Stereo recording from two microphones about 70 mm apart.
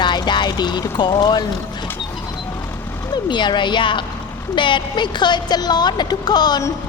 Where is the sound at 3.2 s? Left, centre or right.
Left.